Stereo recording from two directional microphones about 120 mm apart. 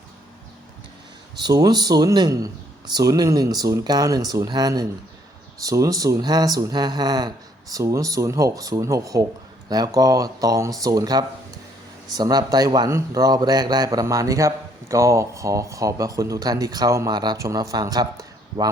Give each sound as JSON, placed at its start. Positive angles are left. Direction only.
{"t": 1.4, "sound": "speech", "side_deg": -35}